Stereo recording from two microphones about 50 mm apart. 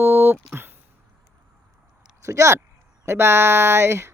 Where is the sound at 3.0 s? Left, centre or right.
Right.